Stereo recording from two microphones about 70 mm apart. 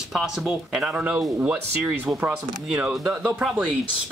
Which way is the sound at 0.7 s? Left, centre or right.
Centre.